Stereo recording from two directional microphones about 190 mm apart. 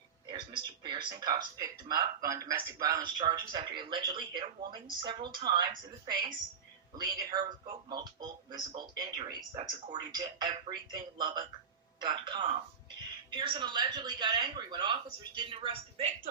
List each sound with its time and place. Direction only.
0.3 s speech: 25° right (ahead or behind)